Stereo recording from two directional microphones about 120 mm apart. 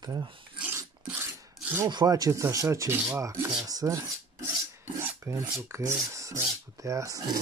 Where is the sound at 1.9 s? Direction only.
35° right (ahead or behind).